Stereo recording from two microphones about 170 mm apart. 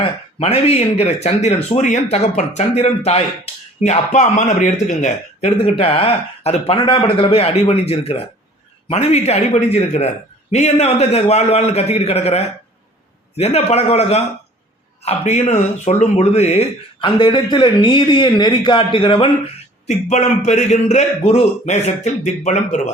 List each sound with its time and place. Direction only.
0.0 s speech: 35° left (ahead or behind)
19.9 s speech: 45° left (ahead or behind)